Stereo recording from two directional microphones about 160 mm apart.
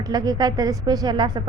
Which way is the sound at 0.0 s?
25° right (ahead or behind).